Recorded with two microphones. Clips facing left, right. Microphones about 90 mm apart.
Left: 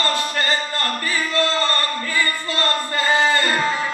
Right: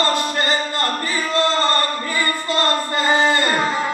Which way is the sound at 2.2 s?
20° right (ahead or behind).